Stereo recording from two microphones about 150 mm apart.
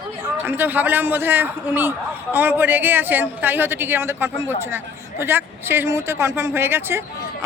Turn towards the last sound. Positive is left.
turn(degrees=-15)  # may be behind; listen again after turning